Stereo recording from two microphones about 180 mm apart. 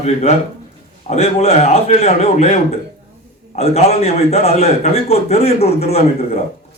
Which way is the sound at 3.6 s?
35° left (ahead or behind).